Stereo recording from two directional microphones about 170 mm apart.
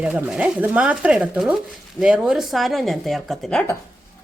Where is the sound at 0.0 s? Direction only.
5° right (ahead or behind).